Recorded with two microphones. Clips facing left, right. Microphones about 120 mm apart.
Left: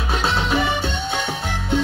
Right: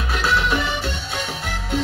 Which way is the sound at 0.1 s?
25° left (ahead or behind).